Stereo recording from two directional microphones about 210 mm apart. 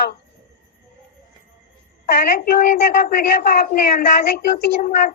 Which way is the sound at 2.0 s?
45° left (ahead or behind).